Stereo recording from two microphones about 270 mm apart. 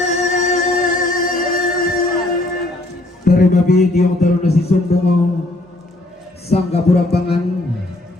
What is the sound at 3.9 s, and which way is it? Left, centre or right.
Speech, left.